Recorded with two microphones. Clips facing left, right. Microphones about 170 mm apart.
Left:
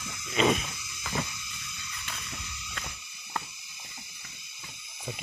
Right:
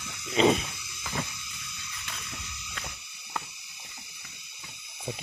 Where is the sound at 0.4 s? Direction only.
30° right (ahead or behind).